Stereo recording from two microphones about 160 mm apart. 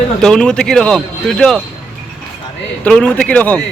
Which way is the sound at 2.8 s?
5° left (ahead or behind).